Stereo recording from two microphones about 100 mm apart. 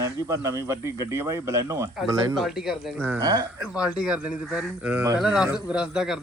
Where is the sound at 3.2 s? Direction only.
40° right (ahead or behind).